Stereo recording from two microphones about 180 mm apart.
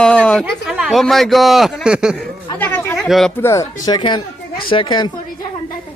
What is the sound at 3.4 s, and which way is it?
Speech, 15° left (ahead or behind).